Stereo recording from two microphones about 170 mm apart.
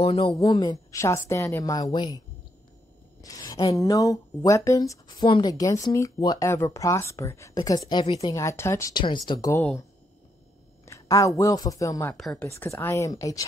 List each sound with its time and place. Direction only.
0.0 s speech: 35° left (ahead or behind)
0.4 s speech: 20° left (ahead or behind)
7.9 s speech: 30° left (ahead or behind)
8.4 s speech: 15° left (ahead or behind)
10.9 s speech: 20° left (ahead or behind)
12.2 s speech: centre (ahead or behind)
12.4 s speech: 15° left (ahead or behind)